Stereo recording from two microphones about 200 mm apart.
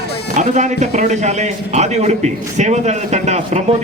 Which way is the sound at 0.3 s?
35° right (ahead or behind).